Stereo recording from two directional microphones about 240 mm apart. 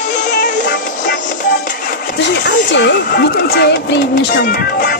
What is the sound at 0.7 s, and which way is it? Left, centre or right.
Music, left.